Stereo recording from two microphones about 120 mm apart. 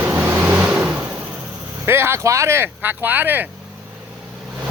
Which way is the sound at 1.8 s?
20° right (ahead or behind).